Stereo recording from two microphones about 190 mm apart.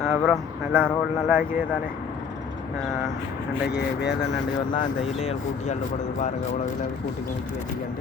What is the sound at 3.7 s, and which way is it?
Speech, 60° left (ahead or behind).